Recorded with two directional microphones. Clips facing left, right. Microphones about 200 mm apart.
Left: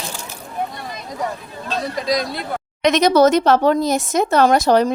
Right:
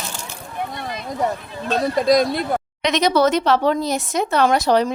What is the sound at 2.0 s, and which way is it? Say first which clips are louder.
Speech: right 6 dB; 55° right (ahead or behind).